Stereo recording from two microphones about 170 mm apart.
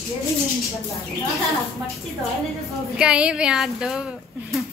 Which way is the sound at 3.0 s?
5° right (ahead or behind).